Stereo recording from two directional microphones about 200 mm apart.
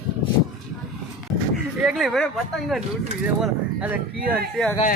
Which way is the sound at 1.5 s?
Centre (ahead or behind).